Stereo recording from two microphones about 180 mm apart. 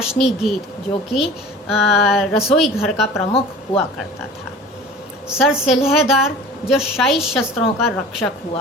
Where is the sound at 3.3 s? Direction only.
30° left (ahead or behind).